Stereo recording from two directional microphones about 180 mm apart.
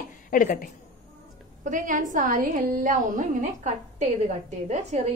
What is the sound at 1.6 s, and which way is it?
A woman's voice, 45° right (ahead or behind).